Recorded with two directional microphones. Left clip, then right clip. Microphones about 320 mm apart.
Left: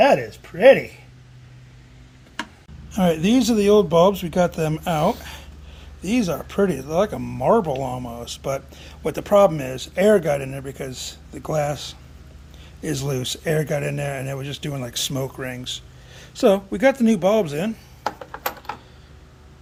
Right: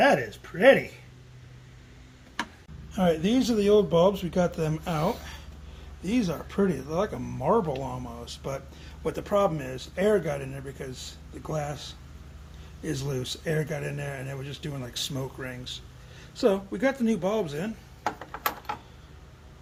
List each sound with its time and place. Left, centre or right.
0.0 s speech: left
2.9 s speech: left